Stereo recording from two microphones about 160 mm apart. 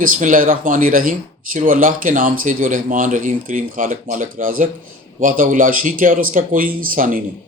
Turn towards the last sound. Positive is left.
turn(degrees=-60)  # may be behind; listen again after turning